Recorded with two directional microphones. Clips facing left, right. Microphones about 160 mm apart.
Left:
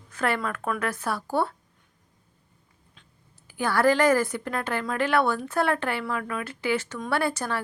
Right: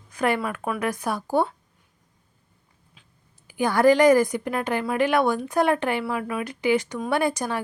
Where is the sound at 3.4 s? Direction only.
15° right (ahead or behind).